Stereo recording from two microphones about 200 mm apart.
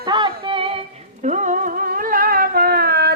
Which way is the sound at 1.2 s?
35° right (ahead or behind).